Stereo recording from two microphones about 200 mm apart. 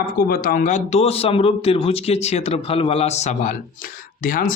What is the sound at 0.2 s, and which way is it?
Speech, 45° left (ahead or behind).